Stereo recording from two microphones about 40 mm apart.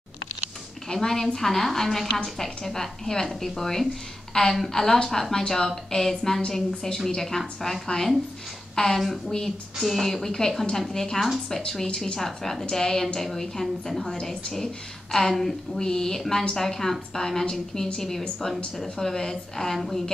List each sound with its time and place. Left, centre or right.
0.8 s a woman's voice: centre
9.8 s speech: centre
15.8 s speech: centre